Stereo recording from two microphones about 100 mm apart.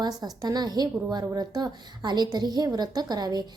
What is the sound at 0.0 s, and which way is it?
A woman's voice, 40° right (ahead or behind).